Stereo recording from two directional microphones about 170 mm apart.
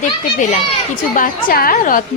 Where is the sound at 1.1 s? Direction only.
55° left (ahead or behind).